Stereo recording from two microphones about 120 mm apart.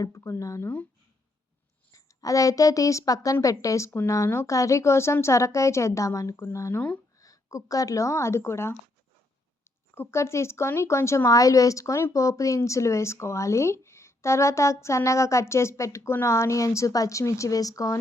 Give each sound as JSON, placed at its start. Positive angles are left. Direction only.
{"t": 0.0, "sound": "speech", "side_deg": 25}
{"t": 1.9, "sound": "speech", "side_deg": 30}
{"t": 9.9, "sound": "speech", "side_deg": 20}